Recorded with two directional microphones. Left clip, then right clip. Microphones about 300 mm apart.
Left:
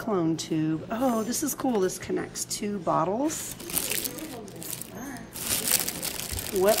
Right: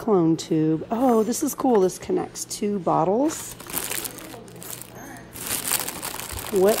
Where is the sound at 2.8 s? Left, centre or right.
Left.